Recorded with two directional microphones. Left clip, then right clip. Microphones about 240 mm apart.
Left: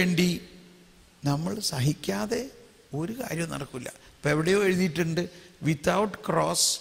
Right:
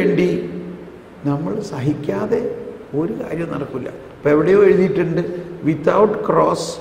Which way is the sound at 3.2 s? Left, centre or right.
Left.